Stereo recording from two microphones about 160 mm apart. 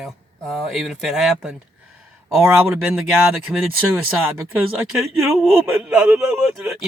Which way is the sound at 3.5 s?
5° right (ahead or behind).